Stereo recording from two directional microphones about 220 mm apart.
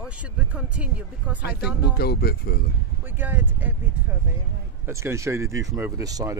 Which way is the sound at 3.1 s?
10° right (ahead or behind).